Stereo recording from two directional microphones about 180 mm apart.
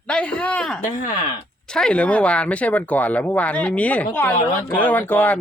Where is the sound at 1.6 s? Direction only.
5° left (ahead or behind).